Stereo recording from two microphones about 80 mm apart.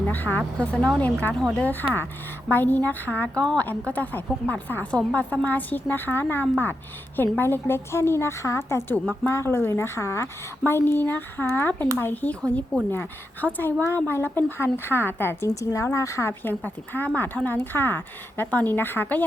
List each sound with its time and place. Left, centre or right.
0.1 s a woman's voice: left
3.3 s a woman's voice: centre
3.6 s a woman's voice: centre
15.4 s a woman's voice: left
16.4 s a woman's voice: left